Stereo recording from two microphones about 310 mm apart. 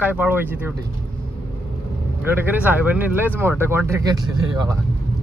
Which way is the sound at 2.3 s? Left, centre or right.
Centre.